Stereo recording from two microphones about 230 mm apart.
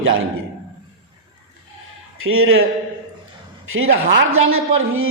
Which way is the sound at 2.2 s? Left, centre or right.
Right.